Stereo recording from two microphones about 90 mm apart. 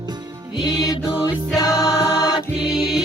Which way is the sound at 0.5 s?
55° left (ahead or behind).